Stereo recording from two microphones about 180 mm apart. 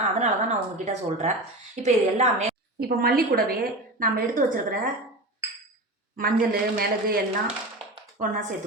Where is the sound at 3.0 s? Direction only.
55° right (ahead or behind).